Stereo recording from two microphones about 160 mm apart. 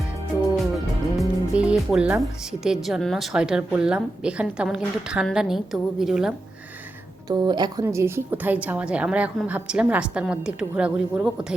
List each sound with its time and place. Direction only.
1.2 s music: 5° right (ahead or behind)
2.5 s a woman's voice: 5° right (ahead or behind)
7.3 s speech: 25° right (ahead or behind)
7.9 s a woman's voice: 15° right (ahead or behind)